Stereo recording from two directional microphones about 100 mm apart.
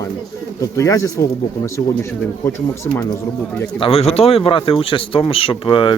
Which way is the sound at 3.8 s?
75° left (ahead or behind).